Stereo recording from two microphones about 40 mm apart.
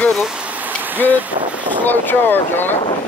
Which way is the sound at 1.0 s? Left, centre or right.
Left.